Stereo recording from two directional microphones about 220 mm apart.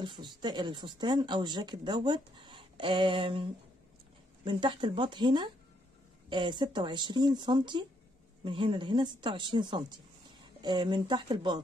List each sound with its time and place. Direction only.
0.0 s speech: 20° right (ahead or behind)
4.5 s speech: 20° right (ahead or behind)